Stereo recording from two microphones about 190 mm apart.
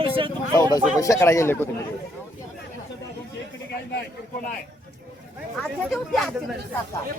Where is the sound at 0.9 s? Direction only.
15° left (ahead or behind).